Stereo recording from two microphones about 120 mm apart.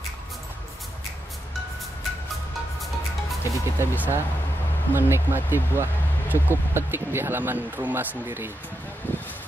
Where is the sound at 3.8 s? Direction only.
15° right (ahead or behind).